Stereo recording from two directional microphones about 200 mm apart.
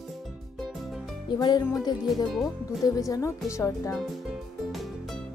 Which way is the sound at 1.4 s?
20° left (ahead or behind).